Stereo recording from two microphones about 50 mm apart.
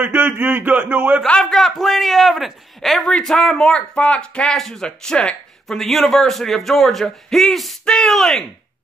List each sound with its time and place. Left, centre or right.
0.1 s speech: right
1.4 s speech: centre
4.6 s speech: centre
4.8 s speech: centre
5.8 s speech: centre